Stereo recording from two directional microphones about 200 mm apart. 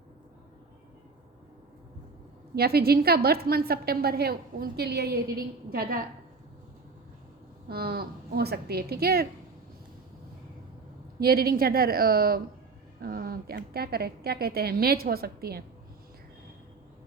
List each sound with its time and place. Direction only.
2.6 s a woman's voice: 50° right (ahead or behind)
7.7 s a woman's voice: 50° right (ahead or behind)
11.2 s a woman's voice: 50° right (ahead or behind)